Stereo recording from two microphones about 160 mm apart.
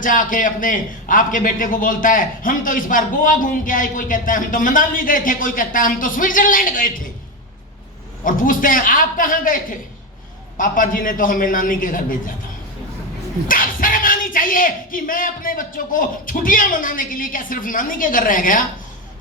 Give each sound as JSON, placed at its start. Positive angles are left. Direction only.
{"t": 0.0, "sound": "a man's voice", "side_deg": 55}
{"t": 8.2, "sound": "a man's voice", "side_deg": 55}
{"t": 13.5, "sound": "a man's voice", "side_deg": 60}